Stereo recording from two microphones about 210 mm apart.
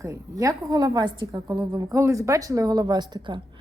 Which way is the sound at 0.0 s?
15° right (ahead or behind).